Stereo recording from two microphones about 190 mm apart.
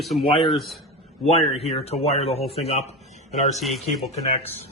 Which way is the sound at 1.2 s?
35° left (ahead or behind).